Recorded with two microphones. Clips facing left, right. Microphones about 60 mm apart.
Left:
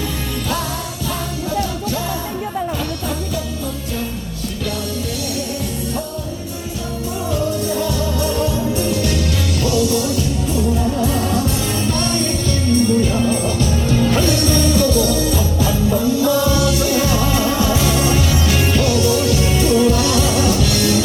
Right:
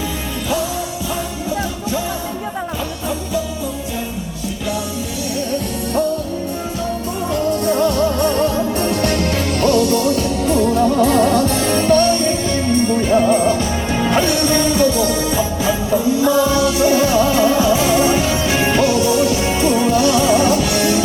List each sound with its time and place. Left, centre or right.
7.6 s music: right